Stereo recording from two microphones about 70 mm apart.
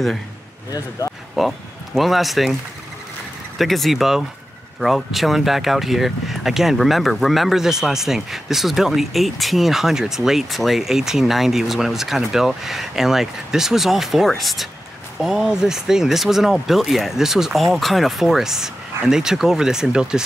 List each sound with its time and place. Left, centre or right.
0.7 s speech: left
1.4 s speech: centre
3.5 s speech: centre